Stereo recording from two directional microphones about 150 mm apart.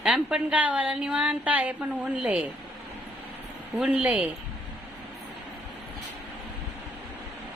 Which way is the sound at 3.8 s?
10° right (ahead or behind).